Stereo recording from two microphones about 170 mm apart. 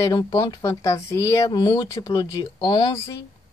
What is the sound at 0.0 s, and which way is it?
A woman's voice, 20° left (ahead or behind).